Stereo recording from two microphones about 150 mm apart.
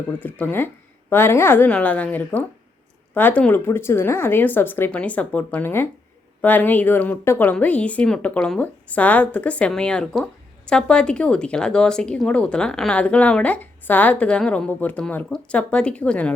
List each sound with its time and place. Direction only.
0.2 s speech: 10° left (ahead or behind)